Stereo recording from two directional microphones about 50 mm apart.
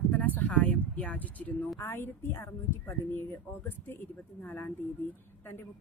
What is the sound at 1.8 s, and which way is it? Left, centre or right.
A woman's voice, left.